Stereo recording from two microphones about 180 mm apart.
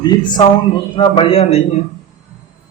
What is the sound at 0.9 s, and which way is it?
Speech, 30° left (ahead or behind).